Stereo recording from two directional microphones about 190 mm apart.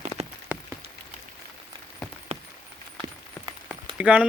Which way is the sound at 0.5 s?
5° right (ahead or behind).